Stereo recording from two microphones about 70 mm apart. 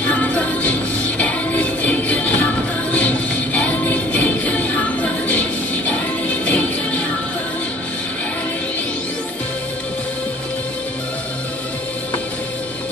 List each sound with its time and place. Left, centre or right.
0.0 s music: left